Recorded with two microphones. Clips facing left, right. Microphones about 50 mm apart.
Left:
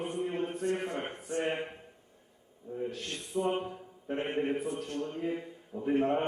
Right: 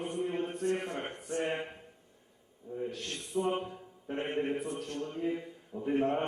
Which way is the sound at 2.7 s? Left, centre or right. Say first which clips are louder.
Left 1 dB; centre.